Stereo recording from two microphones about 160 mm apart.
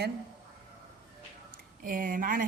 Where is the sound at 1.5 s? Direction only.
60° right (ahead or behind).